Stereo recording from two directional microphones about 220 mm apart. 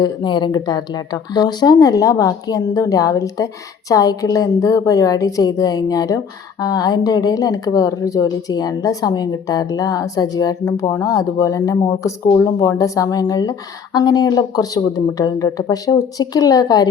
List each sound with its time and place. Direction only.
0.0 s speech: 20° left (ahead or behind)